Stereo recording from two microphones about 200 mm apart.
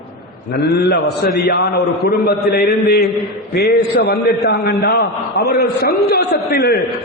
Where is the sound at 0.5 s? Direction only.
55° left (ahead or behind).